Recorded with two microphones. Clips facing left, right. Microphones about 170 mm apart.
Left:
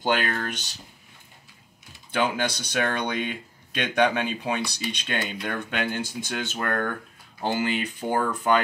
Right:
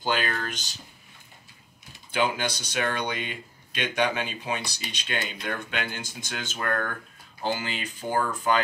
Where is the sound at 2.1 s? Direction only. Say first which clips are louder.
Left 1 dB; 60° left (ahead or behind).